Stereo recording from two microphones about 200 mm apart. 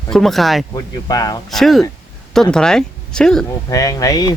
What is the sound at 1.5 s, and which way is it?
Speech, centre (ahead or behind).